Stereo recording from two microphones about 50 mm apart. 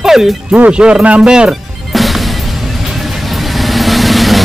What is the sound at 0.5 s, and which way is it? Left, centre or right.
Speech, right.